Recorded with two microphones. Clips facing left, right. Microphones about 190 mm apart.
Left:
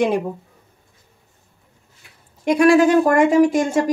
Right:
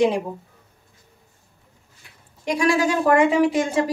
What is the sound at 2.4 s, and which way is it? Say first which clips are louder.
A woman's voice: left 7 dB; 55° left (ahead or behind).